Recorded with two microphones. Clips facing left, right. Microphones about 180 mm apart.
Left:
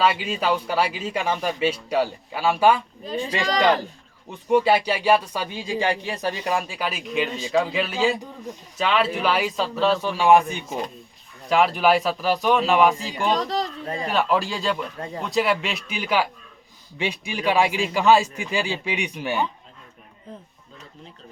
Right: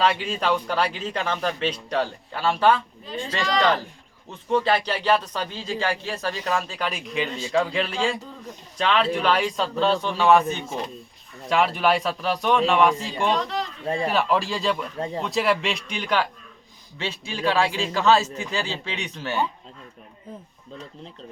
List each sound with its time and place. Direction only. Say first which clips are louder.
0.0 s a man's voice: left 1 dB; 5° left (ahead or behind)
11.4 s a man's voice: left 2 dB; centre (ahead or behind)
13.3 s speech: left 2 dB; 35° left (ahead or behind)
14.1 s a man's voice: left 3 dB; centre (ahead or behind)